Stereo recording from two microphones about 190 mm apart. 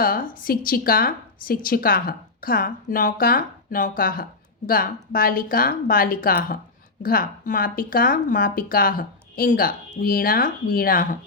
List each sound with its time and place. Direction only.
0.0 s a woman's voice: 45° left (ahead or behind)